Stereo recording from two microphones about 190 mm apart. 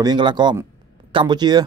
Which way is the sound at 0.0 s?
25° right (ahead or behind).